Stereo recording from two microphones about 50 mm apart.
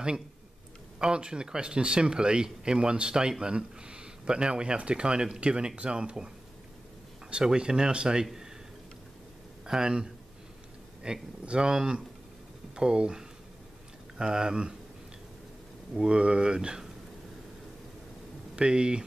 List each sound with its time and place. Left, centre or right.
0.9 s speech: centre
9.7 s speech: centre
16.0 s speech: right
18.6 s speech: centre